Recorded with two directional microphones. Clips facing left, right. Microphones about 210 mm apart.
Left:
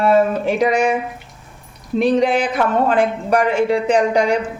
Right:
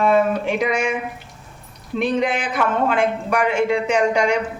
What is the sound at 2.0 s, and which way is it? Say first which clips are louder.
Speech: left 5 dB; 35° left (ahead or behind).